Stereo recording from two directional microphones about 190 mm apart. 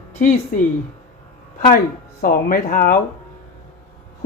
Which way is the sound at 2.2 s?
50° left (ahead or behind).